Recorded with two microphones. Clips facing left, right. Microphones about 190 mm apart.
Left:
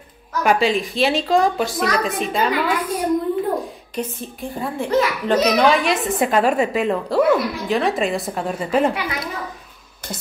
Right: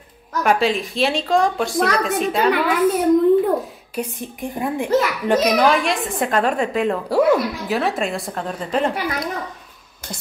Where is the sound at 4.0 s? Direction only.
15° right (ahead or behind); by 8.9 s 5° left (ahead or behind).